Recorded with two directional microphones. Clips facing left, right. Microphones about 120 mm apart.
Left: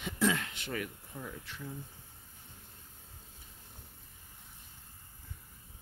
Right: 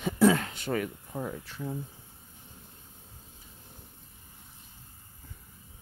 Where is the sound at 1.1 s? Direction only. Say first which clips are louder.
Right 8 dB; 45° right (ahead or behind).